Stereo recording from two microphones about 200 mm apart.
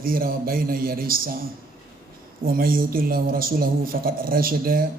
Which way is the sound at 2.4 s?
45° right (ahead or behind).